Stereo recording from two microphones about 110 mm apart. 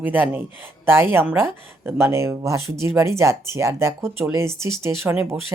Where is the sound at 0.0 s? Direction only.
15° right (ahead or behind).